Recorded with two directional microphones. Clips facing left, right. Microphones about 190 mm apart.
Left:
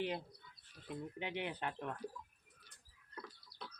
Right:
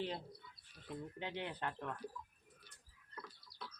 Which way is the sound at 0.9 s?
15° left (ahead or behind).